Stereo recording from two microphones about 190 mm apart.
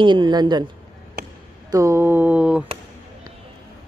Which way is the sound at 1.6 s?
15° right (ahead or behind).